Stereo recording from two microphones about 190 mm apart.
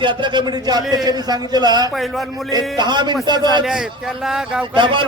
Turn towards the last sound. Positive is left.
turn(degrees=-25)  # may be behind; listen again after turning